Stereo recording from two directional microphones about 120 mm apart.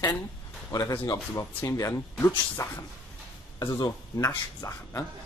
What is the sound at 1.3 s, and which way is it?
Speech, 25° left (ahead or behind).